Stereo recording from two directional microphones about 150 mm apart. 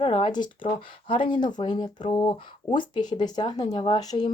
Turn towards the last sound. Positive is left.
turn(degrees=25)  # may be behind; listen again after turning